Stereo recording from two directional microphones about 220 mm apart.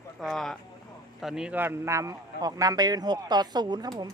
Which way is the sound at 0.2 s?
Centre (ahead or behind).